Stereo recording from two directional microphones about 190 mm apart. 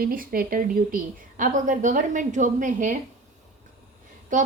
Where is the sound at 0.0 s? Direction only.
50° right (ahead or behind).